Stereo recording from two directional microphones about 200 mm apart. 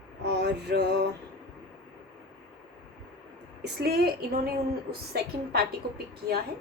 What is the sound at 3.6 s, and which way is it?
A woman's voice, 50° right (ahead or behind).